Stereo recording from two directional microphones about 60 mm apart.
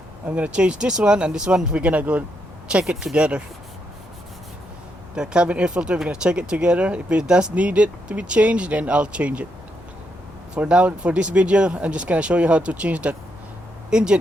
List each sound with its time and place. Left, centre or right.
0.3 s speech: right
5.1 s speech: centre
10.5 s speech: centre